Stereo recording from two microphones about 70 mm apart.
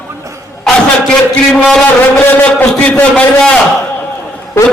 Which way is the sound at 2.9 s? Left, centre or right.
Centre.